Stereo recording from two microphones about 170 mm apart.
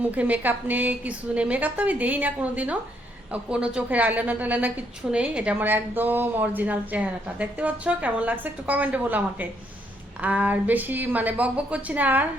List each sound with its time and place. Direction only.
0.0 s speech: 10° right (ahead or behind)